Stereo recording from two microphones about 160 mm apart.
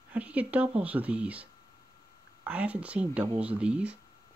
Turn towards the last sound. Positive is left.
turn(degrees=-5)  # may be behind; listen again after turning